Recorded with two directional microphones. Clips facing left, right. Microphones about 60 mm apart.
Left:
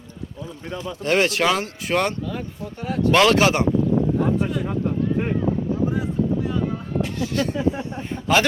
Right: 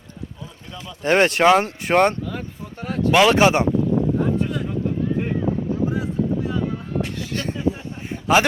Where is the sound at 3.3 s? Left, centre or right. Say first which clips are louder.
Right 2 dB; right.